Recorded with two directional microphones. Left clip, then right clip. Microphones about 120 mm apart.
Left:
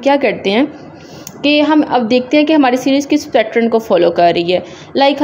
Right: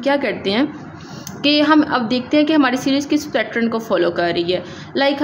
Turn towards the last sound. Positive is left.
turn(degrees=35)  # may be behind; listen again after turning